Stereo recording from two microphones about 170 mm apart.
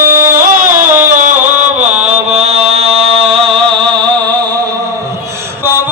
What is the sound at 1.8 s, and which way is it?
Mantra, 45° right (ahead or behind).